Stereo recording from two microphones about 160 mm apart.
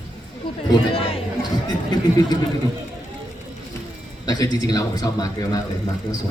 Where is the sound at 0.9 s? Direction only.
40° left (ahead or behind).